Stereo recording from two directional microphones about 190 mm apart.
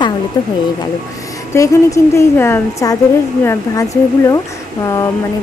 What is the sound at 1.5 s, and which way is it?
A woman's voice, 15° left (ahead or behind).